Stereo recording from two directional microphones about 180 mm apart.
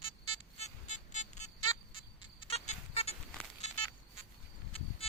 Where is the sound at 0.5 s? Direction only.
40° left (ahead or behind).